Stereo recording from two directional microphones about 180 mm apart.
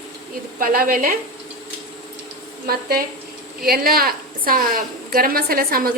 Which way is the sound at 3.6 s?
55° right (ahead or behind).